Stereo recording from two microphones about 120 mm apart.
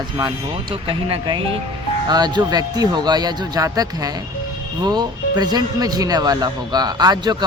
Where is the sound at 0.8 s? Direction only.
45° right (ahead or behind).